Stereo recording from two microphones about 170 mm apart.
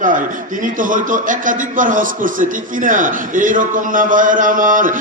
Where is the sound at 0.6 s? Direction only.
50° right (ahead or behind).